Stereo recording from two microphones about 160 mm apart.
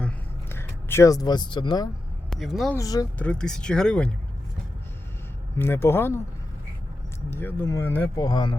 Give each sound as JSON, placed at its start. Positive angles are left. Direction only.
{"t": 0.0, "sound": "a sound", "side_deg": 15}
{"t": 2.3, "sound": "speech", "side_deg": 0}
{"t": 2.7, "sound": "speech", "side_deg": 20}
{"t": 3.2, "sound": "speech", "side_deg": 5}
{"t": 5.5, "sound": "speech", "side_deg": 15}
{"t": 7.3, "sound": "speech", "side_deg": 15}
{"t": 8.2, "sound": "speech", "side_deg": 25}